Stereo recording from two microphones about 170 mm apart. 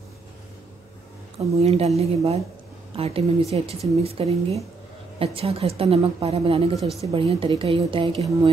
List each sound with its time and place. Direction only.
1.6 s a woman's voice: 40° right (ahead or behind)